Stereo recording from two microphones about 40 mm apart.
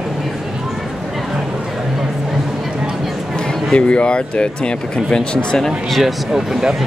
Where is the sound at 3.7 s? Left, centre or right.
Left.